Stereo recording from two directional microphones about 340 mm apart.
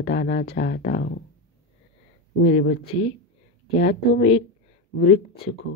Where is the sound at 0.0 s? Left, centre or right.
Left.